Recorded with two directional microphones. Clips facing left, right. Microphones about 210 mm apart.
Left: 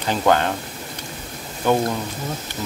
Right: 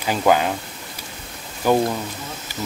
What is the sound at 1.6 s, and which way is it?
Speech, 5° right (ahead or behind).